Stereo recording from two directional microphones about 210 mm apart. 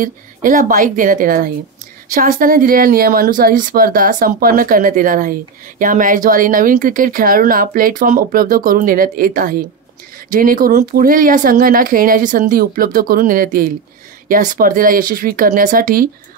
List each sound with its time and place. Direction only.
0.0 s speech: 40° right (ahead or behind)